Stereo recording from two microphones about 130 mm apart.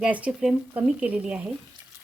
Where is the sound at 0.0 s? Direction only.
10° right (ahead or behind).